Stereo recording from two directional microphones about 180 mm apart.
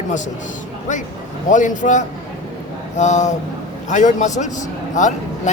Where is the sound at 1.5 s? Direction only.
45° left (ahead or behind).